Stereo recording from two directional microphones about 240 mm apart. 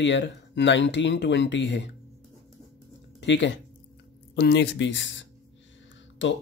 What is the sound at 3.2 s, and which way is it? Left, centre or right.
Speech, left.